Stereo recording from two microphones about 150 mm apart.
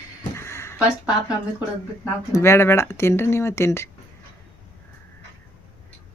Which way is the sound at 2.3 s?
15° left (ahead or behind).